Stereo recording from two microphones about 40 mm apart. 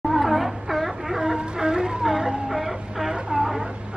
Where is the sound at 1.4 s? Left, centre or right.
Right.